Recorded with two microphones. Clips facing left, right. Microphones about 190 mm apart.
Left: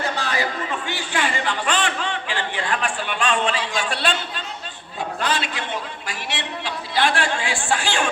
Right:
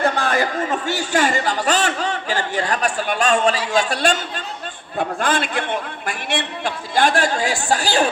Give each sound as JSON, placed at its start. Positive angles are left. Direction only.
{"t": 0.0, "sound": "a man's voice", "side_deg": -50}